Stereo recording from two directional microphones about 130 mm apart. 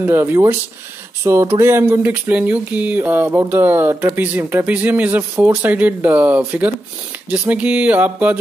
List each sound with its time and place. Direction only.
0.0 s speech: 20° right (ahead or behind)